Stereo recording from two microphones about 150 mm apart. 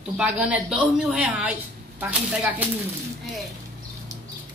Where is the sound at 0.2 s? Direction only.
10° right (ahead or behind).